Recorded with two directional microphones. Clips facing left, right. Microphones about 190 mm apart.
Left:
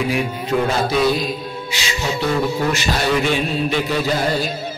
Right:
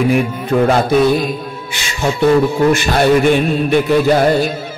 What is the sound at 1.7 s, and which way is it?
Speech, 55° right (ahead or behind).